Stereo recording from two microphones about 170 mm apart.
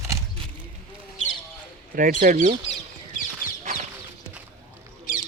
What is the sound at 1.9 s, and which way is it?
Speech, 50° right (ahead or behind).